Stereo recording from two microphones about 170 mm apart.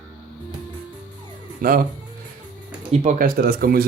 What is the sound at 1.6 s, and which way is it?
Speech, 55° right (ahead or behind).